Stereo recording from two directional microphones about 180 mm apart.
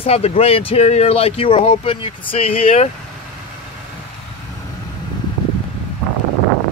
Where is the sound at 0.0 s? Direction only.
35° left (ahead or behind).